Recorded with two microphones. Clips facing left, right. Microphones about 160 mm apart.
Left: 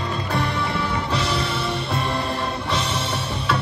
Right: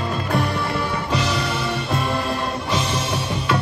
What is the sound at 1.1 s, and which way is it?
Music, centre (ahead or behind).